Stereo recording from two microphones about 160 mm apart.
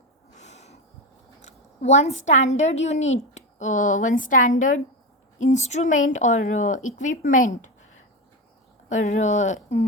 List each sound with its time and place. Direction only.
0.3 s a sound: 45° left (ahead or behind)
1.4 s a woman's voice: 45° left (ahead or behind)
8.9 s speech: 50° left (ahead or behind)